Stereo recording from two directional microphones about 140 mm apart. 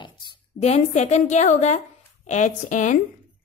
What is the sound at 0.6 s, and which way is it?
Speech, 50° left (ahead or behind).